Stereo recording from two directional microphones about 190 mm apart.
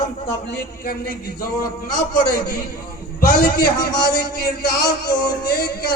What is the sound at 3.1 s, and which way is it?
A man's voice, 50° left (ahead or behind).